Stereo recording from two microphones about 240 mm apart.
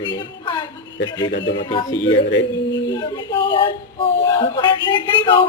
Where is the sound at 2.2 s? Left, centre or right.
Left.